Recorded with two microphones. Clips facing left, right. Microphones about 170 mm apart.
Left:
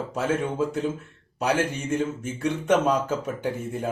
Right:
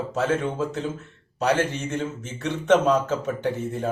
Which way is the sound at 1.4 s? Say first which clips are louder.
Right 2 dB; 10° left (ahead or behind).